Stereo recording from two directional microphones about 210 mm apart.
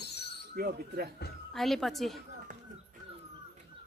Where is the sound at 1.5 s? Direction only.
Centre (ahead or behind).